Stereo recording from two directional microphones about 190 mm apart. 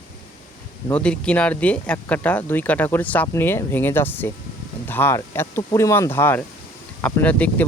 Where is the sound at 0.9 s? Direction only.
5° left (ahead or behind).